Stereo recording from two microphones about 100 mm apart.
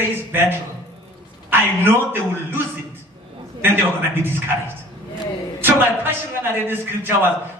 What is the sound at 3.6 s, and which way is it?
Speech, 20° right (ahead or behind).